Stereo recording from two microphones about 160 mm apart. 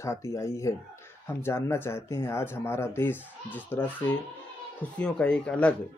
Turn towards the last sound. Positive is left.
turn(degrees=5)  # may be behind; listen again after turning